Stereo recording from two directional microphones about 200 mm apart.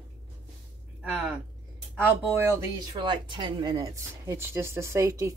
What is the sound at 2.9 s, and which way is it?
Speech, 20° right (ahead or behind).